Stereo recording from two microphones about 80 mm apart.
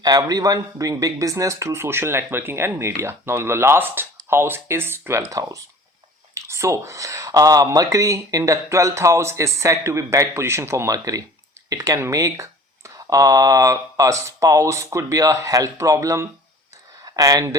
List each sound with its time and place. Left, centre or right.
0.0 s speech: right
5.3 s speech: right
10.9 s speech: right